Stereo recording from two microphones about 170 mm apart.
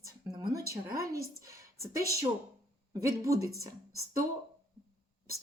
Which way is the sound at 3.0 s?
20° right (ahead or behind).